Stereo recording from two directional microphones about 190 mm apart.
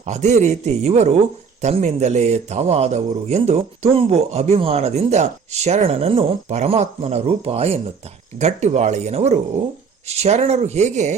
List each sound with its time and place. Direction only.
0.0 s a man's voice: 35° right (ahead or behind)